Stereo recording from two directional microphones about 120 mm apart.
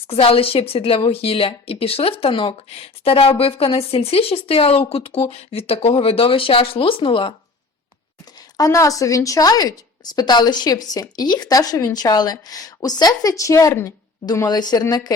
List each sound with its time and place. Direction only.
0.1 s a woman's voice: 50° left (ahead or behind)
8.4 s a woman's voice: 30° left (ahead or behind)